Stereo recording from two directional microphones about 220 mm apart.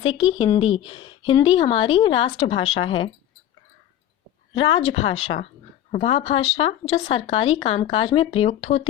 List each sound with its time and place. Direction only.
0.0 s speech: 25° left (ahead or behind)
2.6 s speech: 65° left (ahead or behind)
4.7 s speech: 25° left (ahead or behind)
5.0 s speech: 65° left (ahead or behind)
5.9 s speech: 25° left (ahead or behind)